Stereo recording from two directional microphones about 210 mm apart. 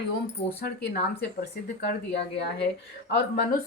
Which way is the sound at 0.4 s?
30° left (ahead or behind).